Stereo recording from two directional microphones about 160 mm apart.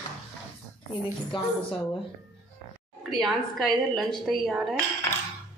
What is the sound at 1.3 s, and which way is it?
Speech, 30° left (ahead or behind).